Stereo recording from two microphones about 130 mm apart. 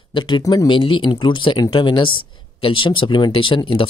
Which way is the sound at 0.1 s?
35° left (ahead or behind).